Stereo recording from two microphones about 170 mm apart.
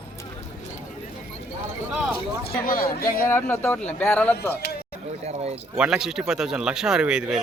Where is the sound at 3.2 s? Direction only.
15° left (ahead or behind).